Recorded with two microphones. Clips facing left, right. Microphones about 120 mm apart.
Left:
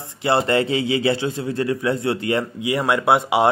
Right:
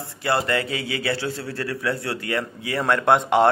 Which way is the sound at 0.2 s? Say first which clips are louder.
Left 4 dB; 25° left (ahead or behind).